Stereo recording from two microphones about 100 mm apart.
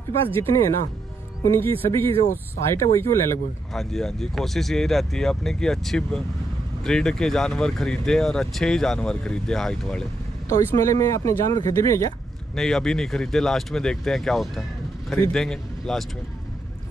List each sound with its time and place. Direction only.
1.4 s speech: 25° left (ahead or behind)
3.7 s speech: 5° left (ahead or behind)
10.5 s speech: 30° left (ahead or behind)
12.5 s speech: 5° left (ahead or behind)